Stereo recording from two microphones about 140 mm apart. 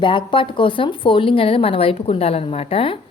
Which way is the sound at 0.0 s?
35° left (ahead or behind).